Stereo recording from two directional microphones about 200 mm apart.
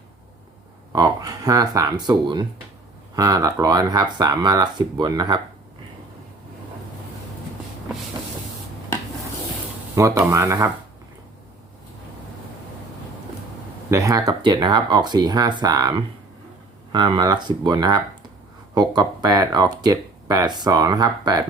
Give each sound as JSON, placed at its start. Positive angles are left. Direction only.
{"t": 0.9, "sound": "speech", "side_deg": -20}
{"t": 9.9, "sound": "speech", "side_deg": -15}
{"t": 13.9, "sound": "speech", "side_deg": -15}